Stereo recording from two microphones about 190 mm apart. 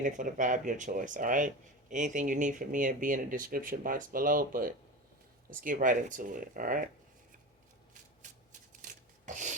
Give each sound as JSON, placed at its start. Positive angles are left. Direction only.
{"t": 0.0, "sound": "speech", "side_deg": -45}
{"t": 8.2, "sound": "shuffling cards", "side_deg": -40}
{"t": 8.8, "sound": "rub", "side_deg": -40}